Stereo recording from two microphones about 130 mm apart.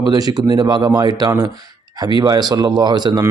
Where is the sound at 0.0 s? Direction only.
30° right (ahead or behind).